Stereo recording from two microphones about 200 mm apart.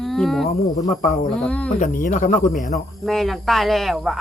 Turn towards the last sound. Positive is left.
turn(degrees=0)  # may be behind; listen again after turning